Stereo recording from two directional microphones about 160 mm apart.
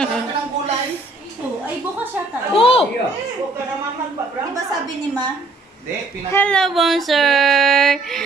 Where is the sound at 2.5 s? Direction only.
35° left (ahead or behind).